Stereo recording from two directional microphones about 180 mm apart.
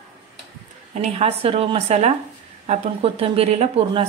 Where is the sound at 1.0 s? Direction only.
35° right (ahead or behind).